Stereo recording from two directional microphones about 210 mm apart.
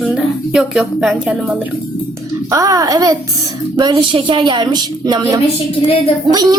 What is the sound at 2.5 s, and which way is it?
A child's voice, 15° right (ahead or behind).